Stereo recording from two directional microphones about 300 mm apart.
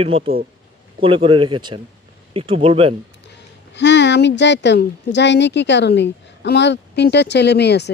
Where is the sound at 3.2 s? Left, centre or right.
Left.